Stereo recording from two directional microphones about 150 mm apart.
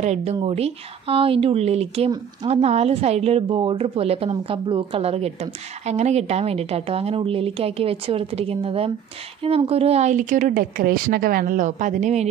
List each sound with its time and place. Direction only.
0.0 s a woman's voice: 45° right (ahead or behind)